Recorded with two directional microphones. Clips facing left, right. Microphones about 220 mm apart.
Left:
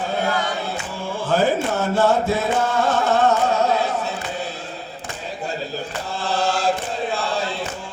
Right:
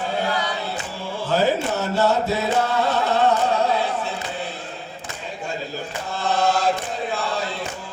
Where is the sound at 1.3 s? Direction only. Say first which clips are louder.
Left 1 dB; 50° left (ahead or behind).